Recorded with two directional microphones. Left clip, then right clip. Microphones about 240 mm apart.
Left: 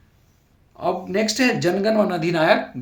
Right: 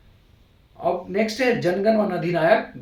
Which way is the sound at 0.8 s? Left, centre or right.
Left.